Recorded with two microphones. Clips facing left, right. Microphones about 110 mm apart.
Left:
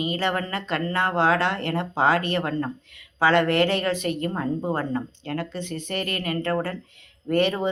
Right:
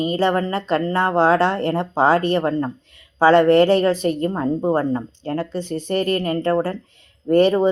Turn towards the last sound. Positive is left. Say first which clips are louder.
# right 7 dB
turn(degrees=-35)  # may be behind; listen again after turning